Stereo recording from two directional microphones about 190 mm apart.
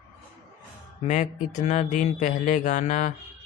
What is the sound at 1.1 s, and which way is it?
Speech, 40° left (ahead or behind).